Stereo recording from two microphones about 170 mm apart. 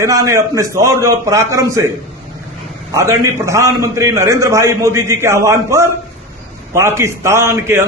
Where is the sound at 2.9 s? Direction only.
20° right (ahead or behind).